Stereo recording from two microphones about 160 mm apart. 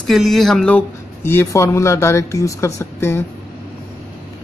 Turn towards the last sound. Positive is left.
turn(degrees=15)  # may be behind; listen again after turning